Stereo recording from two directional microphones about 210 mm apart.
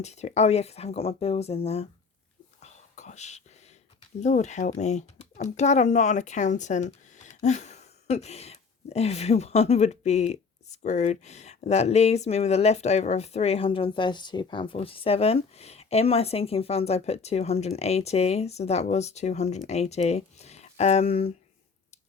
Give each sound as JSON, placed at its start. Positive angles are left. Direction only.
{"t": 0.0, "sound": "speech", "side_deg": 30}
{"t": 2.6, "sound": "whispering", "side_deg": 35}
{"t": 4.2, "sound": "speech", "side_deg": 35}